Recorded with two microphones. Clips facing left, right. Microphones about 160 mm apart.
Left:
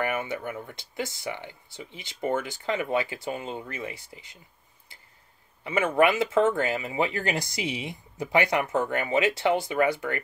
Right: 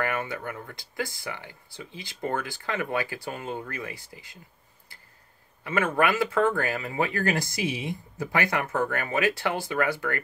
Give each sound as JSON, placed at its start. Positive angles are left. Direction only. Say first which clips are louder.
{"t": 0.0, "sound": "speech", "louder": "left 1 dB", "side_deg": 20}
{"t": 5.6, "sound": "speech", "louder": "left 2 dB", "side_deg": 20}